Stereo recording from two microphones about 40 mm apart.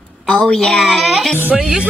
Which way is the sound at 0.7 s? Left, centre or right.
Centre.